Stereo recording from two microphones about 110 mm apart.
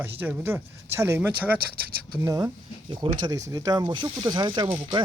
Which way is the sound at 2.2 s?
35° right (ahead or behind).